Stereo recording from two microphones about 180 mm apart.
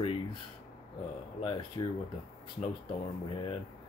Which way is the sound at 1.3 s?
30° left (ahead or behind).